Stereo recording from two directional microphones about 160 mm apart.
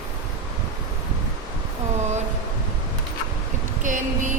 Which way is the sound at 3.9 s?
55° right (ahead or behind).